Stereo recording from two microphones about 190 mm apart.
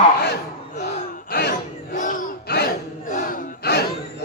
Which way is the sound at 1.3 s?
60° left (ahead or behind).